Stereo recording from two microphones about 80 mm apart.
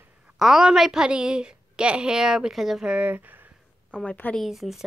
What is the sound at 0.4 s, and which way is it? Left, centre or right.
Speech, centre.